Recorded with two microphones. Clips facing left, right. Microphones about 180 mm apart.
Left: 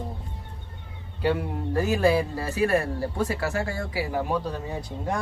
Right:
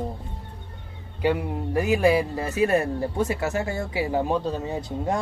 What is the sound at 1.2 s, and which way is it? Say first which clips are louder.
Speech: right 2 dB; 15° right (ahead or behind).